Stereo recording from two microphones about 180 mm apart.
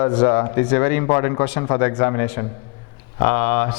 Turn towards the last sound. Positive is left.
turn(degrees=15)  # may be behind; listen again after turning